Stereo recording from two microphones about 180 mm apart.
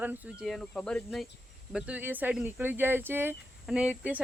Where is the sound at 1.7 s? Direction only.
5° right (ahead or behind).